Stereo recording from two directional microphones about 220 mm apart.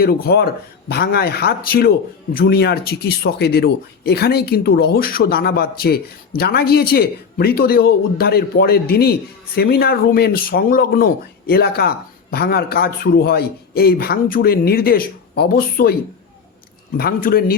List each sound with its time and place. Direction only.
0.0 s speech: 45° left (ahead or behind)
17.0 s speech: 45° left (ahead or behind)